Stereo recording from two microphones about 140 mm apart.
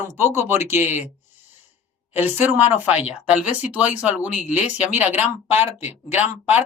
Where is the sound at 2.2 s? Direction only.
15° right (ahead or behind).